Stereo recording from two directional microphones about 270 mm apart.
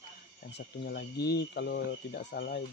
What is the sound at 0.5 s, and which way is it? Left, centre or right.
Speech, left.